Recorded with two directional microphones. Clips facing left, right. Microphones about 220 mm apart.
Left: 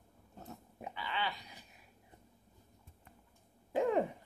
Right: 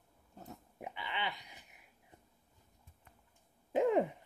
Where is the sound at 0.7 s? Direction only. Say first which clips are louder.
Left 2 dB; 20° right (ahead or behind).